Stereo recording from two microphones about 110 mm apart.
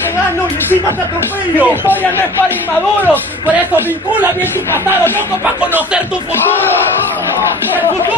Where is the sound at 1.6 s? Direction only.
20° right (ahead or behind).